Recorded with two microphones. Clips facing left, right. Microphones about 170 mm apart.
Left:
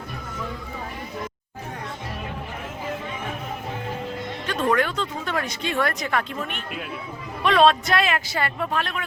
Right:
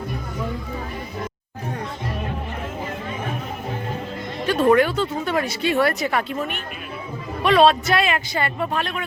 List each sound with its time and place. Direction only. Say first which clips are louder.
4.4 s speech: right 6 dB; 10° right (ahead or behind)